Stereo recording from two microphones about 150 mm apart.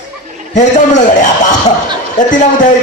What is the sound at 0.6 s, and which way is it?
A man's voice, 55° left (ahead or behind).